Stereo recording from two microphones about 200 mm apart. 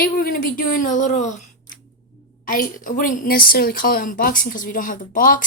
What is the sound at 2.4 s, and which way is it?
A woman's voice, 45° left (ahead or behind).